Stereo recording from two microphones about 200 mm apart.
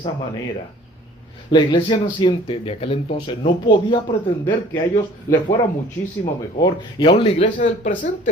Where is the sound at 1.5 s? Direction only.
25° left (ahead or behind).